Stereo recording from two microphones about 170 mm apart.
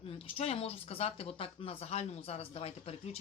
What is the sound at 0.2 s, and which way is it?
A woman's voice, 35° left (ahead or behind).